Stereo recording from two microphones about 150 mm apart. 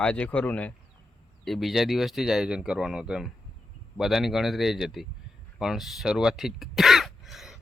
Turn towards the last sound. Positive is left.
turn(degrees=0)  # may be behind; listen again after turning